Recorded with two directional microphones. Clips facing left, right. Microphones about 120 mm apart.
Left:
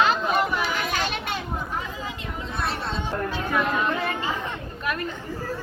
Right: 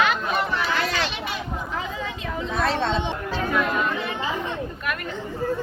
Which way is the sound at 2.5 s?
90° right.